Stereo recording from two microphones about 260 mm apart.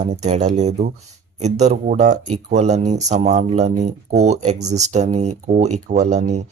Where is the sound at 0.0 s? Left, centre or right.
Right.